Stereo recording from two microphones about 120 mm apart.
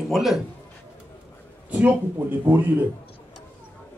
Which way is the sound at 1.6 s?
15° right (ahead or behind).